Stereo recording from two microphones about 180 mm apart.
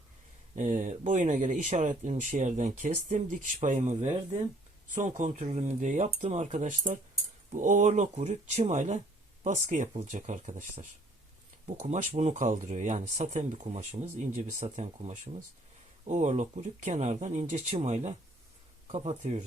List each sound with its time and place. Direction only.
0.5 s speech: 45° right (ahead or behind)